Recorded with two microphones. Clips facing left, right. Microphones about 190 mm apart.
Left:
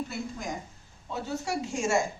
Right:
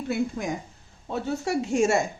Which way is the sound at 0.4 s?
55° right (ahead or behind).